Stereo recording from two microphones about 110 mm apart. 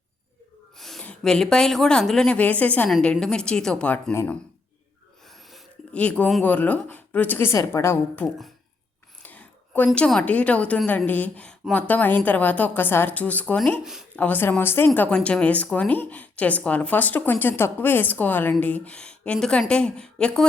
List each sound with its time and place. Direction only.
0.8 s a sound: centre (ahead or behind)
1.2 s speech: 5° left (ahead or behind)
5.9 s a woman's voice: 10° left (ahead or behind)
8.2 s a woman's voice: 15° left (ahead or behind)